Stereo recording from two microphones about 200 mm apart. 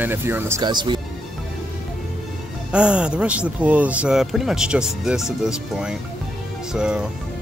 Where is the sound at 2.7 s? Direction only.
5° right (ahead or behind).